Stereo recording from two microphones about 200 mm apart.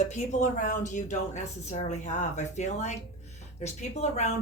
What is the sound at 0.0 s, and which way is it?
A woman's voice, 35° left (ahead or behind).